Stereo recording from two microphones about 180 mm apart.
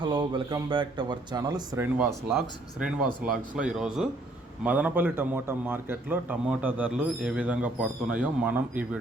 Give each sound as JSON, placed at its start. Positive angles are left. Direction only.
{"t": 0.0, "sound": "speech", "side_deg": -25}
{"t": 2.0, "sound": "a man's voice", "side_deg": 0}